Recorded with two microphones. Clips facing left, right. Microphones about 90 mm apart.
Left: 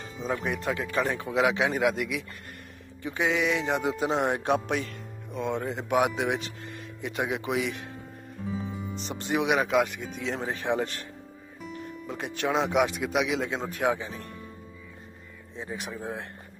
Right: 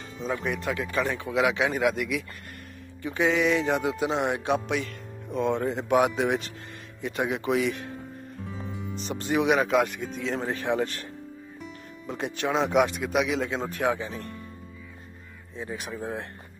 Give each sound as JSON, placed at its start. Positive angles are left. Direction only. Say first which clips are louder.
{"t": 0.4, "sound": "speech", "louder": "even", "side_deg": 30}
{"t": 3.0, "sound": "music", "louder": "right 3 dB", "side_deg": 20}
{"t": 3.3, "sound": "speech", "louder": "right 3 dB", "side_deg": 10}
{"t": 4.3, "sound": "music", "louder": "even", "side_deg": 45}
{"t": 5.3, "sound": "speech", "louder": "right 4 dB", "side_deg": 5}
{"t": 8.5, "sound": "music", "louder": "left 5 dB", "side_deg": 5}
{"t": 8.9, "sound": "speech", "louder": "right 3 dB", "side_deg": 20}
{"t": 9.6, "sound": "speech", "louder": "right 1 dB", "side_deg": 10}
{"t": 11.6, "sound": "music", "louder": "left 4 dB", "side_deg": 0}
{"t": 12.8, "sound": "speech", "louder": "right 1 dB", "side_deg": 10}
{"t": 15.5, "sound": "speech", "louder": "right 1 dB", "side_deg": 20}
{"t": 15.9, "sound": "speech", "louder": "right 3 dB", "side_deg": 0}